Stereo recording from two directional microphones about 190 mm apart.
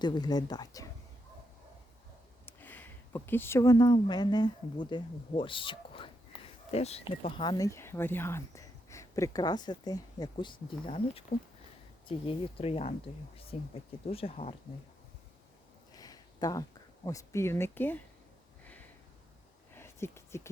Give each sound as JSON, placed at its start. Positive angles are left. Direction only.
{"t": 0.0, "sound": "speech", "side_deg": 20}
{"t": 2.5, "sound": "speech", "side_deg": 10}
{"t": 11.3, "sound": "speech", "side_deg": 40}
{"t": 12.0, "sound": "speech", "side_deg": 30}
{"t": 15.9, "sound": "a sound", "side_deg": 20}
{"t": 17.1, "sound": "speech", "side_deg": 15}
{"t": 18.6, "sound": "a sound", "side_deg": 10}